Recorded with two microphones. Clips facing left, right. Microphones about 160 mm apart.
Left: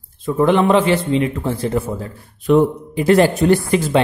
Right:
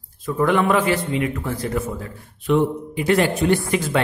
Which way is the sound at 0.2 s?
25° left (ahead or behind).